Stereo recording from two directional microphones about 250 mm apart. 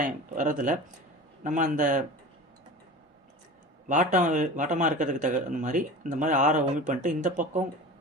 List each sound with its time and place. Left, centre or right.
0.0 s speech: right
3.8 s speech: right